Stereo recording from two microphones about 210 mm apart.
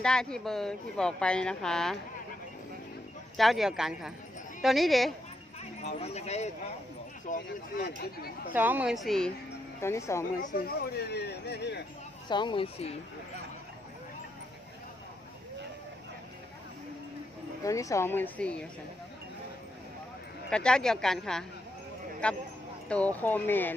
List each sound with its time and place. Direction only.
0.0 s a woman's voice: 5° left (ahead or behind)
3.3 s a woman's voice: centre (ahead or behind)
5.8 s speech: 30° left (ahead or behind)
7.3 s speech: 45° left (ahead or behind)
8.5 s a woman's voice: 10° right (ahead or behind)
9.8 s speech: 15° left (ahead or behind)
10.4 s speech: 45° left (ahead or behind)
12.3 s speech: 20° left (ahead or behind)
17.6 s speech: 15° left (ahead or behind)
20.5 s a woman's voice: 5° left (ahead or behind)